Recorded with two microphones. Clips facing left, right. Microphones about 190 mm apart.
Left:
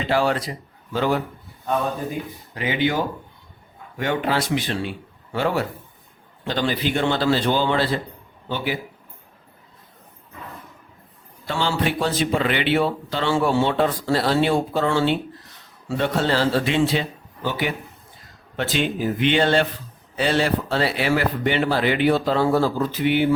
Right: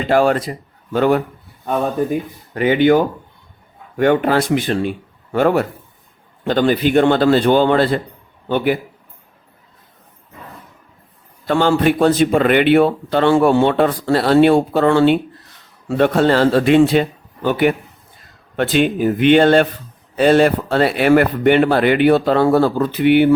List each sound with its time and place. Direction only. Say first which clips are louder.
0.1 s a man's voice: right 7 dB; 50° right (ahead or behind)
2.6 s a man's voice: right 10 dB; 55° right (ahead or behind)
11.4 s a man's voice: right 9 dB; 55° right (ahead or behind)